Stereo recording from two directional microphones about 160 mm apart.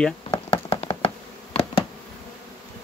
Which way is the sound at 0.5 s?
35° left (ahead or behind).